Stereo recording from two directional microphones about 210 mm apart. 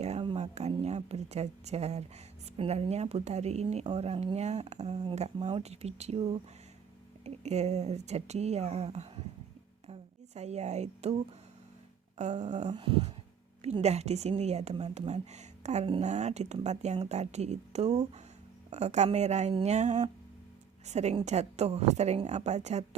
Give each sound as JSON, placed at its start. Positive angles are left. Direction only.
{"t": 0.0, "sound": "a woman's voice", "side_deg": -30}